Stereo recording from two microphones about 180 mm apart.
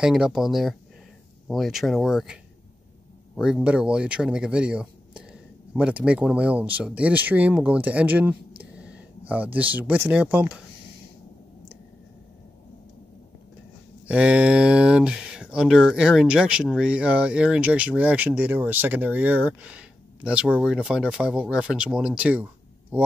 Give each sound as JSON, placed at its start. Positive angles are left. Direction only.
{"t": 0.0, "sound": "speech", "side_deg": 0}
{"t": 3.3, "sound": "speech", "side_deg": -5}
{"t": 14.0, "sound": "speech", "side_deg": -5}